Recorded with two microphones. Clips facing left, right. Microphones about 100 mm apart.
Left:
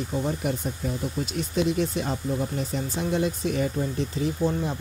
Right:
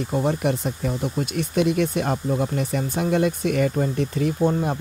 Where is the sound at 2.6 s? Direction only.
65° right (ahead or behind).